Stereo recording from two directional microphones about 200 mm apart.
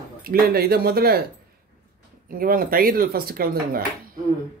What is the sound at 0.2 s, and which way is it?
Speech, 50° right (ahead or behind).